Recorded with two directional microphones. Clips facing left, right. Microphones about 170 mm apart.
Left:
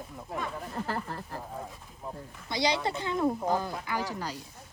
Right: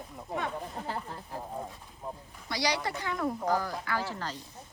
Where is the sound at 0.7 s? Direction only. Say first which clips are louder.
Left 3 dB; 90° left.